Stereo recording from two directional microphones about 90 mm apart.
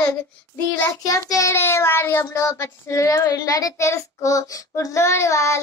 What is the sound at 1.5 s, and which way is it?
Child singing, 25° left (ahead or behind).